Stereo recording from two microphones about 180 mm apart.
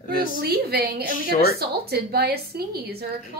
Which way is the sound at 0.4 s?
60° right (ahead or behind).